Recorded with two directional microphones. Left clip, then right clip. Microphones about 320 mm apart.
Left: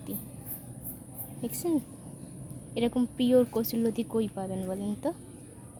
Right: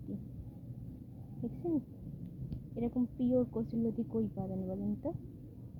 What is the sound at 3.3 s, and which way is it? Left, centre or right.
Speech, left.